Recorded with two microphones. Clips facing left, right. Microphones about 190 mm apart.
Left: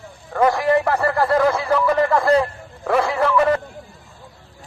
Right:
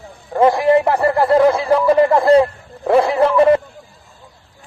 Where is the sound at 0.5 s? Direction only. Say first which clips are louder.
Right 4 dB; 15° right (ahead or behind).